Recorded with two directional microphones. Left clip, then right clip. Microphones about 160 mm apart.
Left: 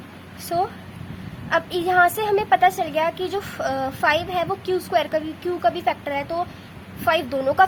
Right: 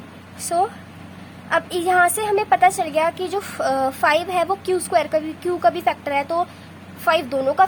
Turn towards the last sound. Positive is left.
turn(degrees=-10)  # may be behind; listen again after turning